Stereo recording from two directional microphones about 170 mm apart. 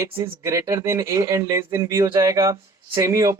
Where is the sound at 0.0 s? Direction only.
15° right (ahead or behind).